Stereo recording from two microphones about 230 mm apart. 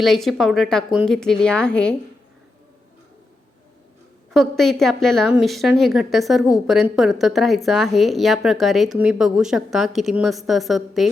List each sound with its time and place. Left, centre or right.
0.0 s a woman's voice: centre
4.4 s a woman's voice: centre